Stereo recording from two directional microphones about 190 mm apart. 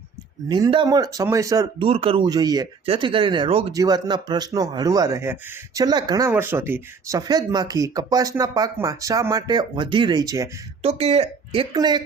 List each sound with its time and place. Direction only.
0.4 s speech: 20° right (ahead or behind)
1.9 s speech: 30° right (ahead or behind)
10.8 s speech: 35° right (ahead or behind)